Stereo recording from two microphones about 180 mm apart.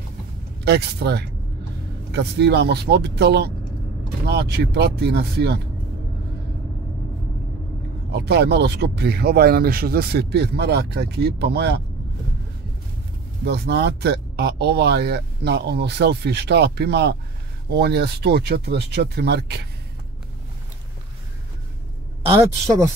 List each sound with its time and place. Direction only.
0.7 s speech: 65° right (ahead or behind)
8.1 s speech: 65° right (ahead or behind)
13.4 s speech: 65° right (ahead or behind)